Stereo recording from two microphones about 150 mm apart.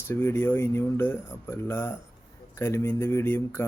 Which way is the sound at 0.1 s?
15° left (ahead or behind).